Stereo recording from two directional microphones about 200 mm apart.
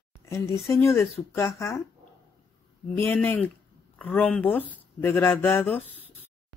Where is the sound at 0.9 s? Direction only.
Centre (ahead or behind).